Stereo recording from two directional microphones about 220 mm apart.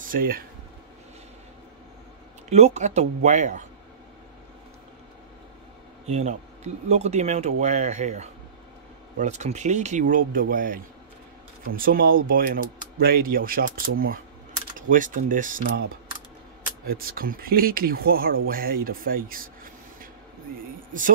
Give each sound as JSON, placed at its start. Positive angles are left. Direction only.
{"t": 0.0, "sound": "speech", "side_deg": -40}
{"t": 2.5, "sound": "speech", "side_deg": -30}
{"t": 6.0, "sound": "speech", "side_deg": -30}
{"t": 15.6, "sound": "speech", "side_deg": -60}
{"t": 16.8, "sound": "speech", "side_deg": -40}